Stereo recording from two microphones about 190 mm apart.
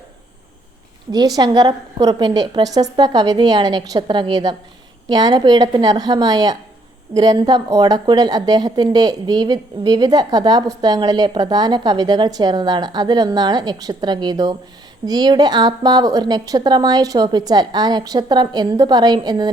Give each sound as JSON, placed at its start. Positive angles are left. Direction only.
{"t": 1.1, "sound": "a woman's voice", "side_deg": -20}